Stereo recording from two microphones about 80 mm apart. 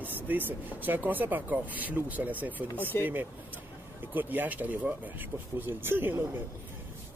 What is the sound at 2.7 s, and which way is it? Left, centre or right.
Speech, left.